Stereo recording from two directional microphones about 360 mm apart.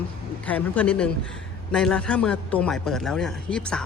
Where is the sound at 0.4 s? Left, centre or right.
Centre.